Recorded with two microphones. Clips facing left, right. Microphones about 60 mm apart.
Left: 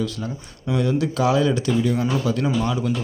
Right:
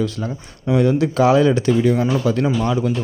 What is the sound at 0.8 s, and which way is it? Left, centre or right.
Speech, right.